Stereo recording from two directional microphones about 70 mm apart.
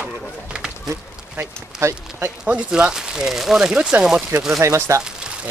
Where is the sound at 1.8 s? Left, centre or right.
Right.